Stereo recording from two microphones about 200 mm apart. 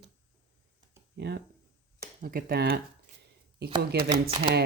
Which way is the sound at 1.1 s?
55° right (ahead or behind).